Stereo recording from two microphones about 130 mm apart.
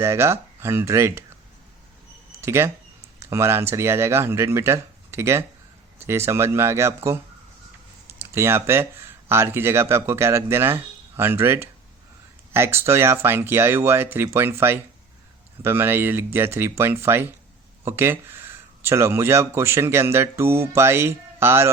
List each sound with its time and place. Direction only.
0.0 s speech: 20° right (ahead or behind)
2.4 s speech: 20° right (ahead or behind)